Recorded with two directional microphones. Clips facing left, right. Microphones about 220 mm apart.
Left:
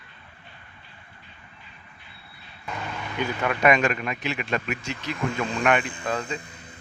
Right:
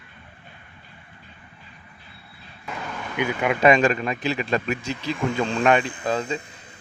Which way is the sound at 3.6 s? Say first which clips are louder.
Right 4 dB; 30° right (ahead or behind).